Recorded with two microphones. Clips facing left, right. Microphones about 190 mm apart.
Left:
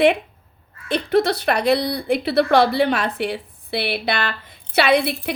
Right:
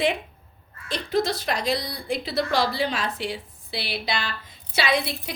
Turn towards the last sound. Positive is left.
turn(degrees=60)  # may be behind; listen again after turning